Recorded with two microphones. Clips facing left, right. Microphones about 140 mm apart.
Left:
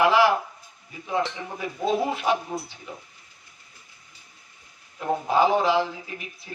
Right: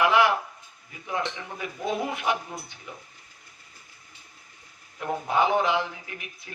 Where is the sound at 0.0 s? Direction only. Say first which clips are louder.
Left 2 dB; 25° left (ahead or behind).